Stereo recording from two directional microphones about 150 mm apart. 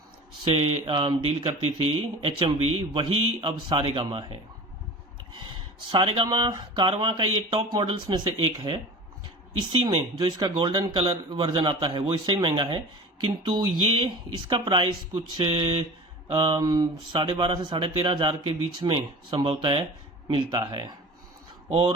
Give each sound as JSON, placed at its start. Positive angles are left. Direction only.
{"t": 0.4, "sound": "speech", "side_deg": -40}
{"t": 9.8, "sound": "speech", "side_deg": -30}
{"t": 11.3, "sound": "speech", "side_deg": -30}